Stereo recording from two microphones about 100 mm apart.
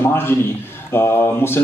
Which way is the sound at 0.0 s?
25° left (ahead or behind).